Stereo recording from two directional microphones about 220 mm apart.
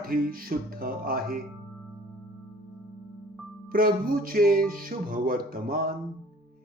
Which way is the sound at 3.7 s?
40° right (ahead or behind).